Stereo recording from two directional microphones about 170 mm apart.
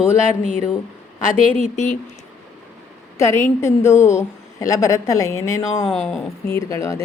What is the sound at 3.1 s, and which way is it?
A woman's voice, 15° left (ahead or behind).